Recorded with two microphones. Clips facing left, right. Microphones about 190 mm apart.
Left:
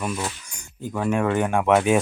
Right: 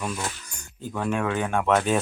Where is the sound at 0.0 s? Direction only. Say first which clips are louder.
Left 3 dB; 10° left (ahead or behind).